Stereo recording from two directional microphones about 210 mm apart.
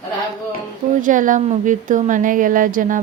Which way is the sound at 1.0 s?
40° right (ahead or behind).